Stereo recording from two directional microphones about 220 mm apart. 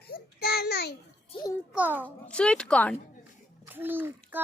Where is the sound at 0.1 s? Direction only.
45° left (ahead or behind).